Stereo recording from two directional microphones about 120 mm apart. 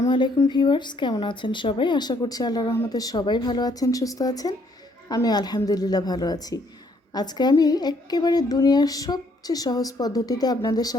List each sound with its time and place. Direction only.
0.4 s a woman's voice: 40° left (ahead or behind)
2.6 s speech: 20° left (ahead or behind)
2.9 s a woman's voice: 30° left (ahead or behind)